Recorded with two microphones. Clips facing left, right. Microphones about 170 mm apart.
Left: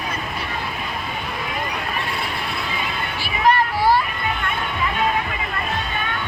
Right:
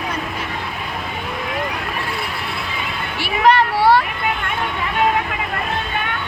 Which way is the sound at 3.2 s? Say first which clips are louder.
Right 4 dB; 70° right (ahead or behind).